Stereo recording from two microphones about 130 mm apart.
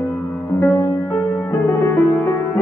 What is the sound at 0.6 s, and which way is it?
Music, 15° left (ahead or behind).